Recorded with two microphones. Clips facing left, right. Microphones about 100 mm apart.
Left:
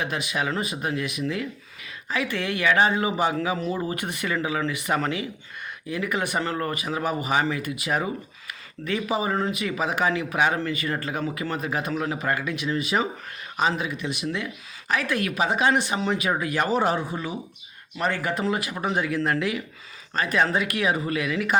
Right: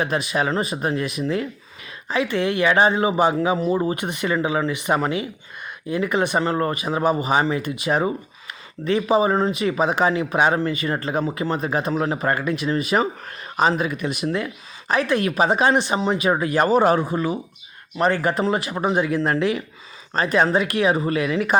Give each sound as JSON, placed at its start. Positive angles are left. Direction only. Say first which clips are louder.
{"t": 0.0, "sound": "speech", "louder": "right 5 dB", "side_deg": -35}
{"t": 16.3, "sound": "speech", "louder": "right 8 dB", "side_deg": -35}
{"t": 17.9, "sound": "speech", "louder": "right 6 dB", "side_deg": -40}